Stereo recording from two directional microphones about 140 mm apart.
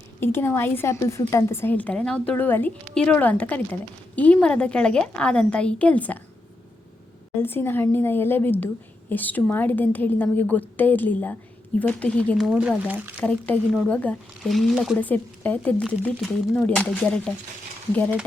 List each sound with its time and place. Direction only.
0.2 s a woman's voice: 15° left (ahead or behind)
7.4 s a woman's voice: 15° left (ahead or behind)
12.5 s speech: 10° right (ahead or behind)
13.1 s a woman's voice: 10° left (ahead or behind)
14.9 s a woman's voice: 10° left (ahead or behind)